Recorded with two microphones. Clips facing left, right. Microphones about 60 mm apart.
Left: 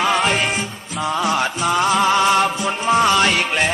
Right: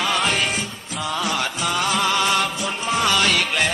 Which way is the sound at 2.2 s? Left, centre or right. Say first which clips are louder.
Left 5 dB; left.